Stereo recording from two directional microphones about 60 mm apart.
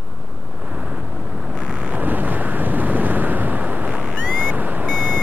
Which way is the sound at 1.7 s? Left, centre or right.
Right.